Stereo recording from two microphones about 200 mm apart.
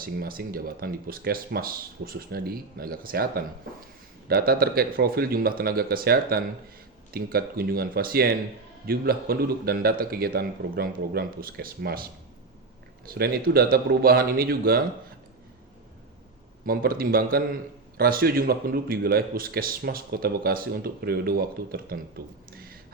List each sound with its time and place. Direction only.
0.0 s a man's voice: 45° right (ahead or behind)
13.1 s a man's voice: 50° right (ahead or behind)
16.6 s a man's voice: 45° right (ahead or behind)